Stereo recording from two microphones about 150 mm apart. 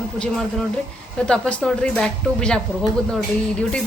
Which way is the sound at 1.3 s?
5° left (ahead or behind).